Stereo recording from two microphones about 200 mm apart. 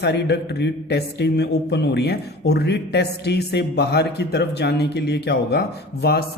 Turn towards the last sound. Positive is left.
turn(degrees=55)  # may be behind; listen again after turning